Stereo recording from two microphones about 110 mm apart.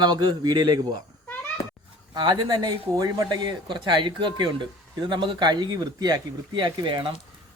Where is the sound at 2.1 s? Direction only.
40° right (ahead or behind).